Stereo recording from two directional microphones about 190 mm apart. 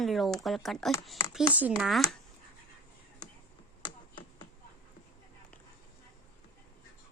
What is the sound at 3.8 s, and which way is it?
Tap, 25° left (ahead or behind).